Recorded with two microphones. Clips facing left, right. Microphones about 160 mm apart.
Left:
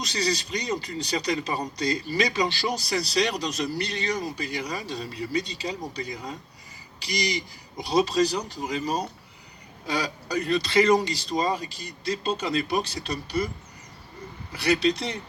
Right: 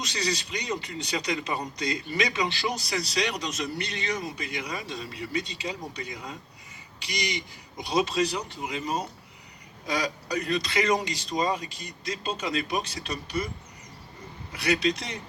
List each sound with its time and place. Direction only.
0.0 s a man's voice: 35° left (ahead or behind)
14.5 s a man's voice: 30° left (ahead or behind)